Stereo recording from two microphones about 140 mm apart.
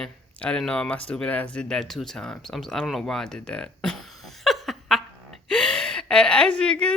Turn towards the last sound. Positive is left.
turn(degrees=5)  # may be behind; listen again after turning